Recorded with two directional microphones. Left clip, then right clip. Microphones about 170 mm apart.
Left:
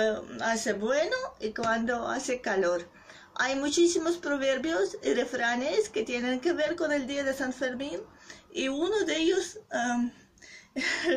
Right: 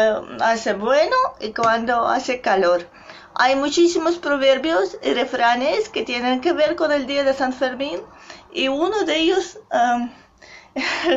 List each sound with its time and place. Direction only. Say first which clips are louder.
0.0 s speech: right 11 dB; 20° left (ahead or behind)